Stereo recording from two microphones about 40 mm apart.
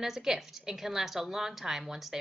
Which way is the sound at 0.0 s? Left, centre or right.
Centre.